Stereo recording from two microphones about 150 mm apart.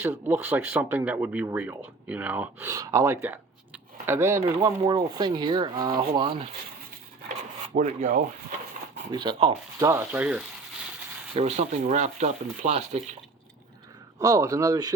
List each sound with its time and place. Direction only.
0.0 s speech: 15° right (ahead or behind)
4.8 s speech: 35° right (ahead or behind)
7.7 s speech: 65° right (ahead or behind)
9.1 s speech: 35° right (ahead or behind)
9.8 s speech: 15° right (ahead or behind)
11.3 s speech: 45° right (ahead or behind)
14.2 s speech: 25° right (ahead or behind)